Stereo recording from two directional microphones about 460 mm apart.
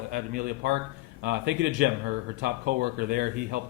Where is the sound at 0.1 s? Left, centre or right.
Centre.